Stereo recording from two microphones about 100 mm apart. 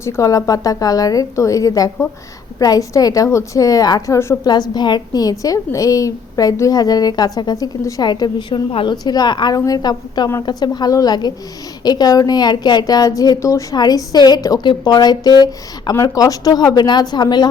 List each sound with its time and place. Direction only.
0.0 s a woman's voice: 35° left (ahead or behind)
4.4 s a woman's voice: 45° left (ahead or behind)
8.1 s a woman's voice: 50° left (ahead or behind)